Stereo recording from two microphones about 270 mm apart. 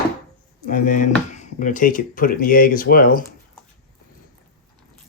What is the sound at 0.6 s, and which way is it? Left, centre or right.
Speech, left.